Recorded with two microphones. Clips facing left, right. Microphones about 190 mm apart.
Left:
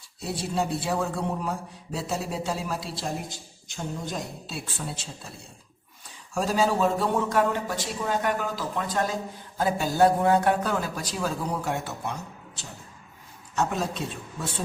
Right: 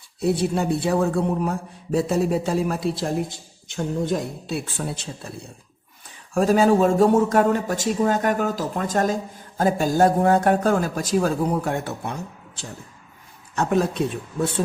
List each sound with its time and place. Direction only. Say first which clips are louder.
0.2 s a man's voice: right 7 dB; 60° right (ahead or behind)
6.3 s a man's voice: right 7 dB; 55° right (ahead or behind)
13.6 s a man's voice: right 6 dB; 60° right (ahead or behind)